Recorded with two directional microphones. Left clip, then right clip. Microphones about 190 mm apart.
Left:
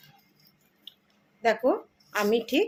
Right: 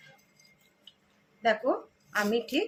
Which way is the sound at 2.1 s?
35° left (ahead or behind).